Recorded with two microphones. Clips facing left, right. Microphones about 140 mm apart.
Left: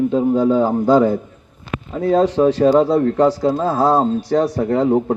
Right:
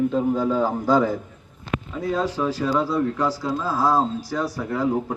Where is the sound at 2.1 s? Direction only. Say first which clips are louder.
Left 11 dB; 35° left (ahead or behind).